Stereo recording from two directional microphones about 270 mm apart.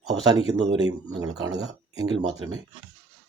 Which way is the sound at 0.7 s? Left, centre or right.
Right.